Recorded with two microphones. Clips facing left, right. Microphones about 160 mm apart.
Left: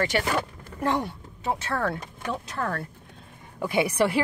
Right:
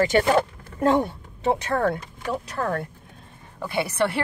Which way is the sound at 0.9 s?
25° right (ahead or behind).